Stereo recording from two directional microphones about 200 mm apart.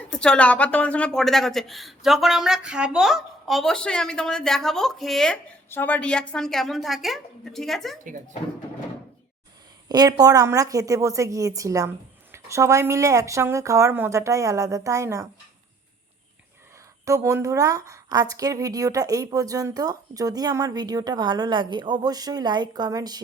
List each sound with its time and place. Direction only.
0.1 s a woman's voice: 5° left (ahead or behind)
9.9 s speech: 20° right (ahead or behind)
17.1 s a woman's voice: 15° right (ahead or behind)